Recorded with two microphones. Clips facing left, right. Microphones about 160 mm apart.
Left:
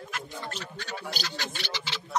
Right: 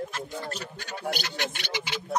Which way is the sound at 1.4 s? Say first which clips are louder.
Right 4 dB; 15° right (ahead or behind).